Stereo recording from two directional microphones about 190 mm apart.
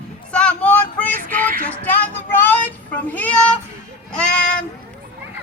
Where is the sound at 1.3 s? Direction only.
45° right (ahead or behind).